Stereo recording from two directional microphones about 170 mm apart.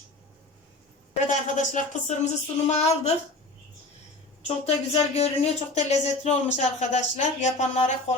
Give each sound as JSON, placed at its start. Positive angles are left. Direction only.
{"t": 1.3, "sound": "speech", "side_deg": 45}
{"t": 4.4, "sound": "speech", "side_deg": 40}